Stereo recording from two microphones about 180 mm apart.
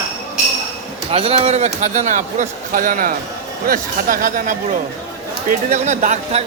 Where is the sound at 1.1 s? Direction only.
30° right (ahead or behind).